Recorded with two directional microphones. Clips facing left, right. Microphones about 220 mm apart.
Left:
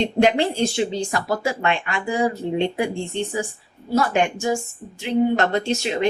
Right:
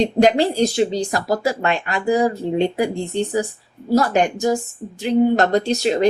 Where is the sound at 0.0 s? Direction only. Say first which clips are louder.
Right 3 dB; 40° right (ahead or behind).